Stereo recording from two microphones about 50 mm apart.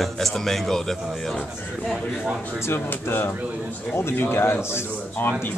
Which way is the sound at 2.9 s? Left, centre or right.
Left.